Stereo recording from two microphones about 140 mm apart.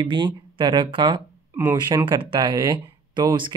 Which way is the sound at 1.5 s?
15° right (ahead or behind).